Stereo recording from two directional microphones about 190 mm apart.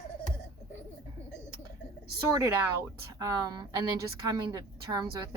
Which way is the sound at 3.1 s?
15° right (ahead or behind).